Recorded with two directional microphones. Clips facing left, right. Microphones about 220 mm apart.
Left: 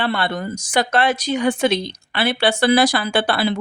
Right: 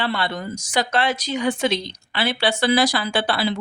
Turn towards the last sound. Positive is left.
turn(degrees=55)  # may be behind; listen again after turning